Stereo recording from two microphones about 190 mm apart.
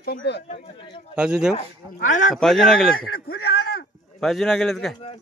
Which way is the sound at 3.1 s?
50° left (ahead or behind).